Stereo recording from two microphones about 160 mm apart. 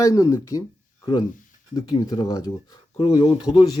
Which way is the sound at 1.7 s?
25° left (ahead or behind).